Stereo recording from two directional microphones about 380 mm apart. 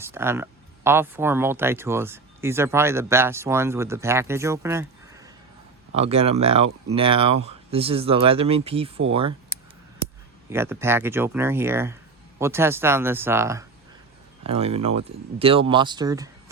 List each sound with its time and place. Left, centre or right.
0.0 s speech: centre
10.5 s speech: centre